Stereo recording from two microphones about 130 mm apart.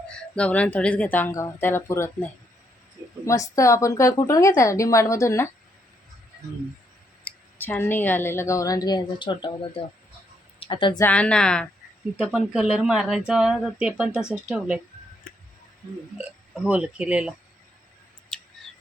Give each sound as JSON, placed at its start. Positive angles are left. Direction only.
{"t": 0.1, "sound": "speech", "side_deg": 10}
{"t": 7.3, "sound": "a woman's voice", "side_deg": 15}
{"t": 11.0, "sound": "speech", "side_deg": 10}
{"t": 12.2, "sound": "speech", "side_deg": -5}
{"t": 16.1, "sound": "speech", "side_deg": -10}